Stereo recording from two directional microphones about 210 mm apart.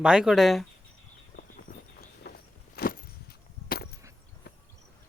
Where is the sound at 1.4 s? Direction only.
45° left (ahead or behind).